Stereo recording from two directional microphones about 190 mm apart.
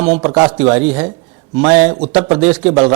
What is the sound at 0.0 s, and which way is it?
Speech, 10° right (ahead or behind).